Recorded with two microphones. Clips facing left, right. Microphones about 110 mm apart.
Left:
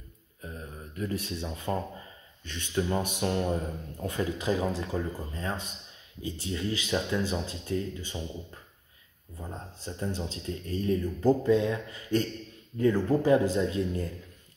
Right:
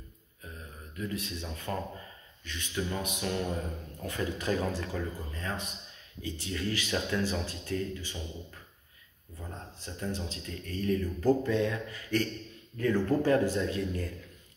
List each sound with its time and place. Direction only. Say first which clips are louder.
0.9 s speech: left 3 dB; 35° left (ahead or behind)
9.9 s speech: left 2 dB; 30° left (ahead or behind)